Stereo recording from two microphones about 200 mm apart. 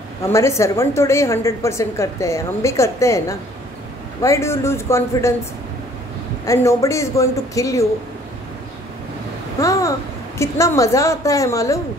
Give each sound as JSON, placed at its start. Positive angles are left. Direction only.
{"t": 0.3, "sound": "a woman's voice", "side_deg": 15}
{"t": 6.4, "sound": "a woman's voice", "side_deg": 15}
{"t": 9.6, "sound": "babbling", "side_deg": 15}
{"t": 10.4, "sound": "a woman's voice", "side_deg": 15}